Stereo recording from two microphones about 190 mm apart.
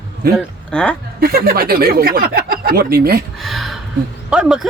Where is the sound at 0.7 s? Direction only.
5° left (ahead or behind).